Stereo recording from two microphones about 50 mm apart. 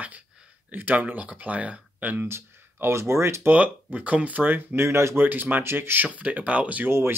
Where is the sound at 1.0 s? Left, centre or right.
Right.